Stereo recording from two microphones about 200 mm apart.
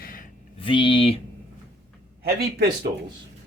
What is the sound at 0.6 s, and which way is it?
Speech, 25° left (ahead or behind).